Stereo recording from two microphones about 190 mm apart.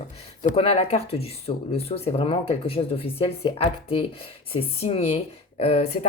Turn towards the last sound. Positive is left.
turn(degrees=30)  # may be behind; listen again after turning